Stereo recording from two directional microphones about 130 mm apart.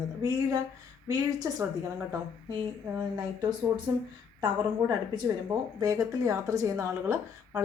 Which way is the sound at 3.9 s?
30° right (ahead or behind).